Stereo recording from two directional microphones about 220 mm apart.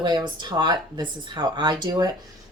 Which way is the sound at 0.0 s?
20° right (ahead or behind).